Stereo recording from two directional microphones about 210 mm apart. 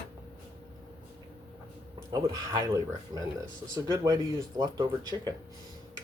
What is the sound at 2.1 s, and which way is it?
Speech, 15° right (ahead or behind).